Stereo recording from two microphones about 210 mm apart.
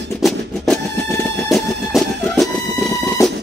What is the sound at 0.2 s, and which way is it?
Music, centre (ahead or behind).